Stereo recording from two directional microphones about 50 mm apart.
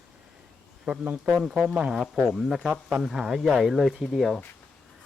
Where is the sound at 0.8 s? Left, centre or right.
Right.